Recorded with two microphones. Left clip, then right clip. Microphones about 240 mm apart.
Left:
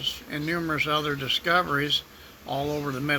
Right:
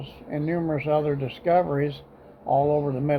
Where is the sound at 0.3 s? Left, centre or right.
Left.